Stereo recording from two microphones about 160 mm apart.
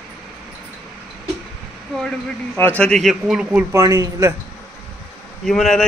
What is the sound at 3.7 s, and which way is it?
Speech, 20° right (ahead or behind).